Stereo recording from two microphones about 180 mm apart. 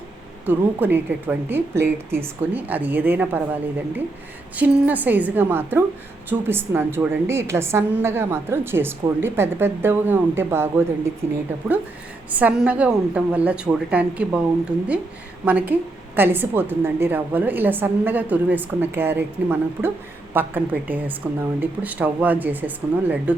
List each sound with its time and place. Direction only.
0.4 s a woman's voice: 10° right (ahead or behind)
4.5 s a woman's voice: 10° right (ahead or behind)
12.3 s a woman's voice: 10° right (ahead or behind)